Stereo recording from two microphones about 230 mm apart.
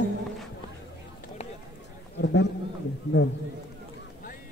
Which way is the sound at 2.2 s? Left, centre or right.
Left.